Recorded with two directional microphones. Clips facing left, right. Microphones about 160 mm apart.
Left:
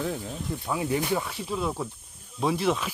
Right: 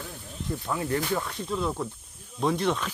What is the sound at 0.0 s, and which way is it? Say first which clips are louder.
Speech: left 11 dB; 85° left.